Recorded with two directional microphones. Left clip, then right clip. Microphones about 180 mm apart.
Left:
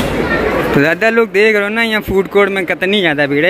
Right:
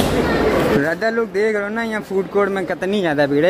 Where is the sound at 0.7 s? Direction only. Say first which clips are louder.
Left 7 dB; 25° left (ahead or behind).